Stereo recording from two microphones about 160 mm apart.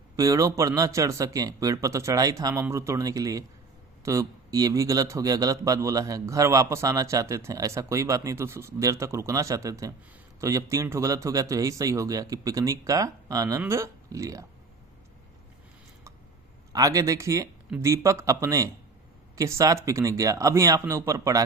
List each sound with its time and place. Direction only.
0.2 s a man's voice: 20° right (ahead or behind)
16.7 s a man's voice: 20° right (ahead or behind)